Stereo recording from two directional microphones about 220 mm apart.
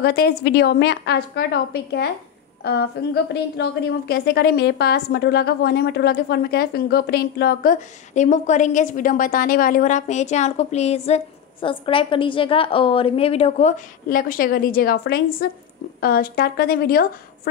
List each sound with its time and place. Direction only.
0.0 s a woman's voice: 50° left (ahead or behind)
3.5 s a woman's voice: 50° left (ahead or behind)